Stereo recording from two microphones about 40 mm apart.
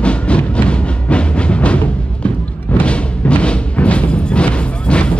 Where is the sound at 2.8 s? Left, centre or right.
Left.